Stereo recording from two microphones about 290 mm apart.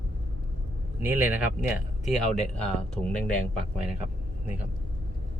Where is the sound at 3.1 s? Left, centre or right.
Left.